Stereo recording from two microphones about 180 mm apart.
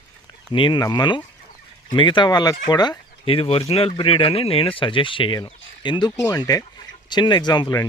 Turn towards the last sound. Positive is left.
turn(degrees=20)  # may be behind; listen again after turning